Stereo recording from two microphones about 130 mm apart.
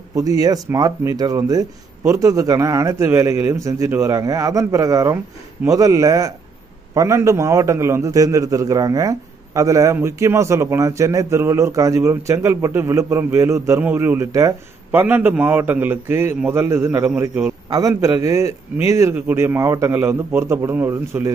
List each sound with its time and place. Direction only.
0.1 s a man's voice: 25° right (ahead or behind)